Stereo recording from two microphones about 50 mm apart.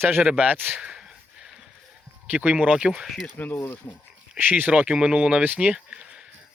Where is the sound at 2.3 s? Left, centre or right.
Right.